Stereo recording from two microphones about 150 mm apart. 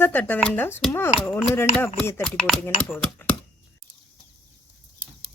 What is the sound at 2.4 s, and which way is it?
Speech, 5° left (ahead or behind).